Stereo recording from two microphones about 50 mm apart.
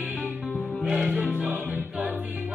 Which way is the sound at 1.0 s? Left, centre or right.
Right.